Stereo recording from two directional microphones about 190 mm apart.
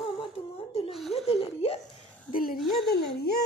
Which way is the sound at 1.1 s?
30° left (ahead or behind).